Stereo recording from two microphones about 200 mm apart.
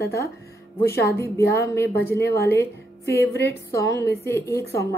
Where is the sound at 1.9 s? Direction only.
10° left (ahead or behind).